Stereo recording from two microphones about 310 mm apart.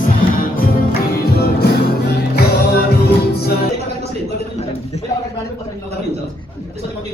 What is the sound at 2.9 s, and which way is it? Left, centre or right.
Music, left.